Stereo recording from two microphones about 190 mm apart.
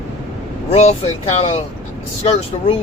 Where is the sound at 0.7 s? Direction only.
35° left (ahead or behind).